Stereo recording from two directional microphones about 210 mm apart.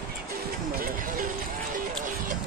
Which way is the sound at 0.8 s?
40° right (ahead or behind).